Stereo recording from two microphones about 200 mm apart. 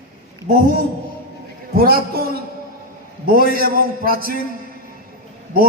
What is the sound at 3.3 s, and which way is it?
A man's voice, 45° right (ahead or behind).